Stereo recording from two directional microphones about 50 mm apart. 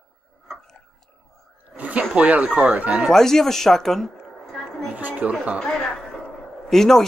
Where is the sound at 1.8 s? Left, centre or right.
Right.